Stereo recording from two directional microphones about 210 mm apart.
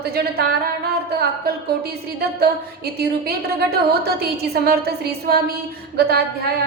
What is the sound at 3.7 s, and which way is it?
A woman's voice, 50° right (ahead or behind).